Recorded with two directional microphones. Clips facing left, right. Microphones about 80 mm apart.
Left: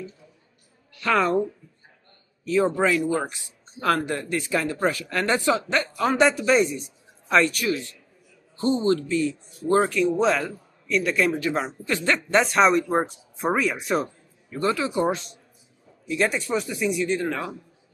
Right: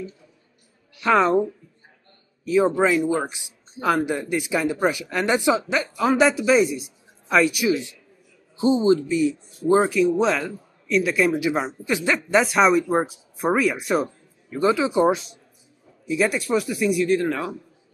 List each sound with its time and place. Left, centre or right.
0.9 s a woman's voice: centre
2.4 s speech: centre
14.5 s speech: centre
16.1 s speech: centre